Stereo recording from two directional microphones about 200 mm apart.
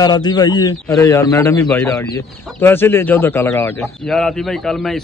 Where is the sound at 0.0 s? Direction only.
20° left (ahead or behind).